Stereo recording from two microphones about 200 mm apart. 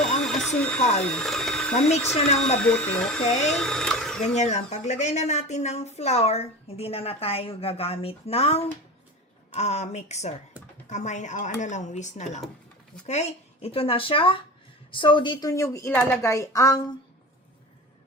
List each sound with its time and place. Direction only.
0.2 s printer: 5° left (ahead or behind)
0.8 s speech: 35° left (ahead or behind)
1.0 s speech: 5° left (ahead or behind)
2.1 s speech: 30° left (ahead or behind)
2.6 s speech: 5° left (ahead or behind)
3.2 s speech: 35° left (ahead or behind)
3.5 s speech: 5° left (ahead or behind)
4.4 s speech: 35° left (ahead or behind); by 16.8 s 15° left (ahead or behind)